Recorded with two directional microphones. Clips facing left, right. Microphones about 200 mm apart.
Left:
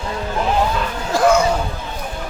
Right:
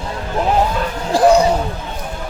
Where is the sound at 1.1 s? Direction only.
35° right (ahead or behind).